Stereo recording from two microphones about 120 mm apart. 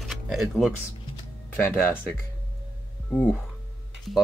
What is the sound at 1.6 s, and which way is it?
Speech, 20° left (ahead or behind).